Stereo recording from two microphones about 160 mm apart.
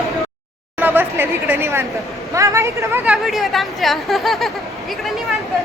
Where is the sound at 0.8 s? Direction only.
10° right (ahead or behind).